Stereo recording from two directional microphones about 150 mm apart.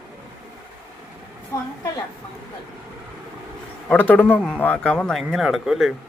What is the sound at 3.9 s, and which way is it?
A man's voice, 10° left (ahead or behind).